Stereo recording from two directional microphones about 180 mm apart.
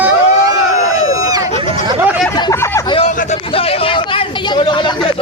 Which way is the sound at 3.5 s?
30° left (ahead or behind).